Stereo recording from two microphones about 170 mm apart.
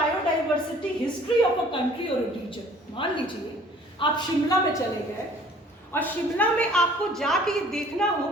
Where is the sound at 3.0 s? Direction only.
30° left (ahead or behind).